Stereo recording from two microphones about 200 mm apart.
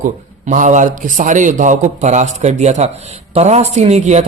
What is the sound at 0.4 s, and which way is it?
Speech, 40° right (ahead or behind).